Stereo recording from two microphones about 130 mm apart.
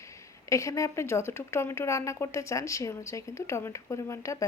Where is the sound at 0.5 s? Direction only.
25° left (ahead or behind).